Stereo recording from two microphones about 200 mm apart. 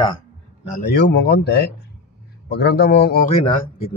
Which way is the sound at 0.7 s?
50° left (ahead or behind).